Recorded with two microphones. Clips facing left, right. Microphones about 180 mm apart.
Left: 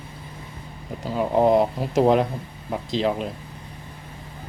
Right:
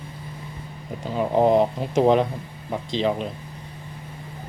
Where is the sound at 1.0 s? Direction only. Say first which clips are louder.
Even; centre (ahead or behind).